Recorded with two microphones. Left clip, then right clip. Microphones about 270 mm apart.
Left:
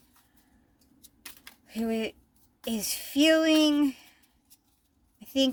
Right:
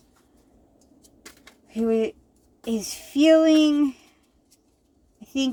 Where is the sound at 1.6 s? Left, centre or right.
Left.